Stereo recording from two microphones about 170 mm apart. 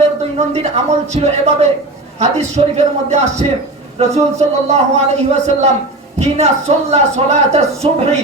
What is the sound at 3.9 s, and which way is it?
Speech, 40° right (ahead or behind).